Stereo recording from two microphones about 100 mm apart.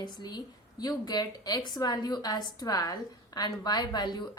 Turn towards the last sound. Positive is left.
turn(degrees=45)  # may be behind; listen again after turning